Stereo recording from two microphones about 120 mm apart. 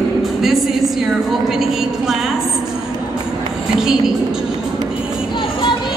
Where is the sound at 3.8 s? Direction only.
5° right (ahead or behind).